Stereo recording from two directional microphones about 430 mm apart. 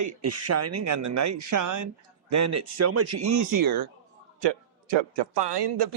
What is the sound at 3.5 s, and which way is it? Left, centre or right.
Speech, right.